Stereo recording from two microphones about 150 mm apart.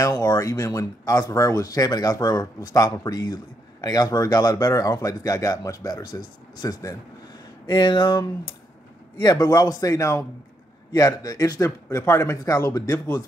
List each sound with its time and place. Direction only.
0.0 s speech: 25° left (ahead or behind)